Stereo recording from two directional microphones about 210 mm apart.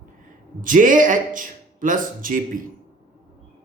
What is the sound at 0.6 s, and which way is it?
Speech, 40° right (ahead or behind).